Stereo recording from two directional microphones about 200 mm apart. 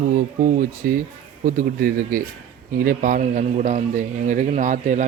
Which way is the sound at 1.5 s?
40° right (ahead or behind).